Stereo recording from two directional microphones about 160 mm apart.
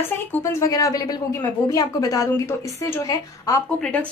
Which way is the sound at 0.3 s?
20° left (ahead or behind).